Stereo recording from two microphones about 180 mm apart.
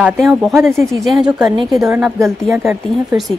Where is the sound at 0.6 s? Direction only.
15° right (ahead or behind).